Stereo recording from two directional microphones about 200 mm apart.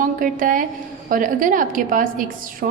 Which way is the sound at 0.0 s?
40° right (ahead or behind).